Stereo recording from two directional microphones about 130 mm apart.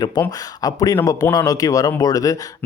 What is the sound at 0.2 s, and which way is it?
Speech, 30° left (ahead or behind).